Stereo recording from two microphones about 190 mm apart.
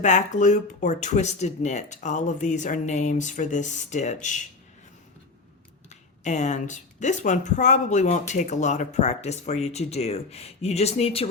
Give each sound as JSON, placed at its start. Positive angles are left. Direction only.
{"t": 0.0, "sound": "speech", "side_deg": 40}
{"t": 6.2, "sound": "speech", "side_deg": 40}